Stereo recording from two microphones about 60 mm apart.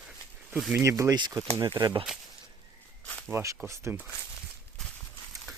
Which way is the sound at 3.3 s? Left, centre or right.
Right.